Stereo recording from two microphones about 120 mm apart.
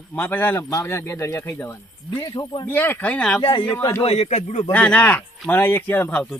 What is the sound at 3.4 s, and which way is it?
Speech, 40° left (ahead or behind).